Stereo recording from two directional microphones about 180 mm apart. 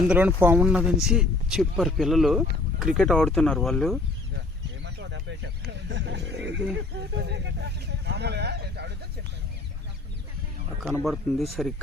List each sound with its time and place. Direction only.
0.1 s speech: 10° right (ahead or behind)
4.9 s speech: 75° right (ahead or behind)
11.0 s speech: centre (ahead or behind)